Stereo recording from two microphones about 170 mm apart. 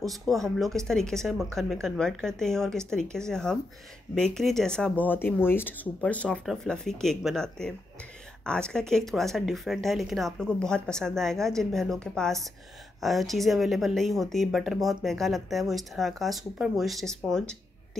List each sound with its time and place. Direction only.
0.0 s speech: centre (ahead or behind)